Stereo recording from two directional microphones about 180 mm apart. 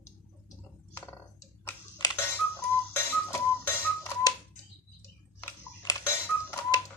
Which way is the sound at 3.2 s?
15° left (ahead or behind).